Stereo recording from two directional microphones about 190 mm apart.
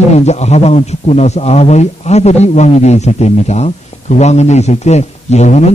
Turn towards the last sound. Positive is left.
turn(degrees=35)  # may be behind; listen again after turning